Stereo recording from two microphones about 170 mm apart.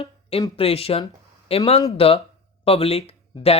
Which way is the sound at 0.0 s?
35° left (ahead or behind).